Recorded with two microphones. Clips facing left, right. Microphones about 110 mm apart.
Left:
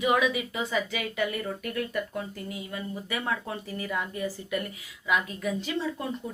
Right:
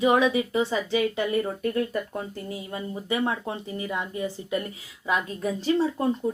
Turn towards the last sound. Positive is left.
turn(degrees=-35)  # may be behind; listen again after turning